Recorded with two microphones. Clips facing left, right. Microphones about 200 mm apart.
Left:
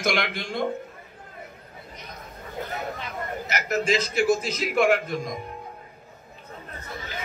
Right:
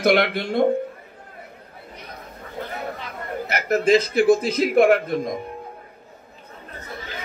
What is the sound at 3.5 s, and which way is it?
A man's voice, 55° right (ahead or behind).